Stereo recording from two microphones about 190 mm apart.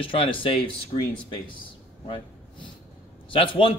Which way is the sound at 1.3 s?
25° left (ahead or behind).